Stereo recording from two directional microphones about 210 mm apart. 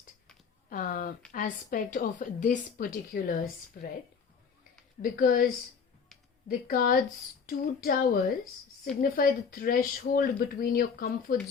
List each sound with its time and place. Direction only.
0.7 s a woman's voice: 40° left (ahead or behind)
5.0 s speech: 40° left (ahead or behind)
6.5 s speech: 45° left (ahead or behind)